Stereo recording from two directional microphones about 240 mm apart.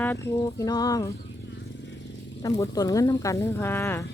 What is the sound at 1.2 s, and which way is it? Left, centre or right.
Vehicle, left.